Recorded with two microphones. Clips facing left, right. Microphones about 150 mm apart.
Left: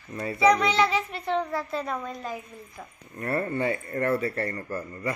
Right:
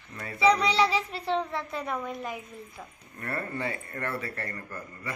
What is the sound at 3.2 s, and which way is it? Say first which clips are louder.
Speech: left 6 dB; 25° left (ahead or behind).